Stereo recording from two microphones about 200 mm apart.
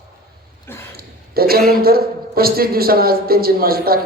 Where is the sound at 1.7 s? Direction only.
50° right (ahead or behind).